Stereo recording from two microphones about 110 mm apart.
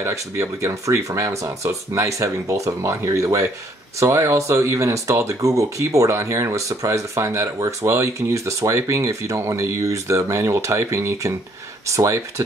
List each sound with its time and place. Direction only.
0.0 s speech: 25° right (ahead or behind)